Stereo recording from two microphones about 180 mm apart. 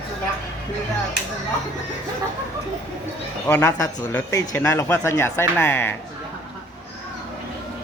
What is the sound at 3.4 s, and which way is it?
Speech, 15° left (ahead or behind).